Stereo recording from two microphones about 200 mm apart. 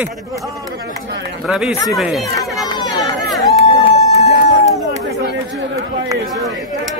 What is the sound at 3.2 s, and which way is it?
Run, centre (ahead or behind).